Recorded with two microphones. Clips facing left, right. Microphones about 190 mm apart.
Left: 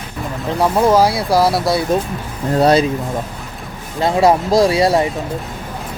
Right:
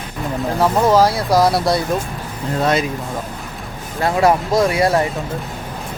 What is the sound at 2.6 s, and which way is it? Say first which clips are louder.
Speech: left 5 dB; 35° left (ahead or behind).